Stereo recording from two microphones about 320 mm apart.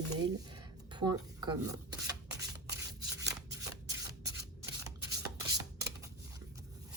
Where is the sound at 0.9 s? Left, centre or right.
Centre.